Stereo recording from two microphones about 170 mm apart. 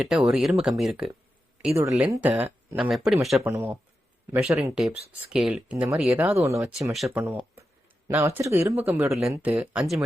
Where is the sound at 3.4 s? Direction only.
10° right (ahead or behind).